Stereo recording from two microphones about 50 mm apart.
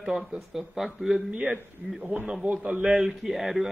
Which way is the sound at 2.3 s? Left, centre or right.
Centre.